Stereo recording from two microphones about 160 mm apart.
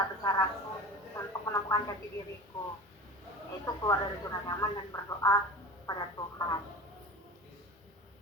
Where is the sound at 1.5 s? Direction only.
20° left (ahead or behind).